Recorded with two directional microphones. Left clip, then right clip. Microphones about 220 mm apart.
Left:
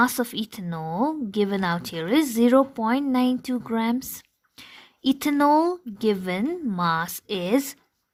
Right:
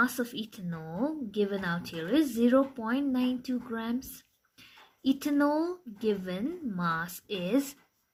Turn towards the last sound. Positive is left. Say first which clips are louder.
# left 6 dB
turn(degrees=40)  # may be behind; listen again after turning